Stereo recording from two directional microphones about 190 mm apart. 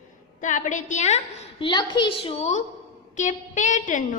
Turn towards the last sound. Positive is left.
turn(degrees=45)  # may be behind; listen again after turning